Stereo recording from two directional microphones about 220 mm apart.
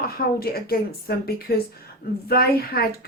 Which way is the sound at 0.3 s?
45° left (ahead or behind).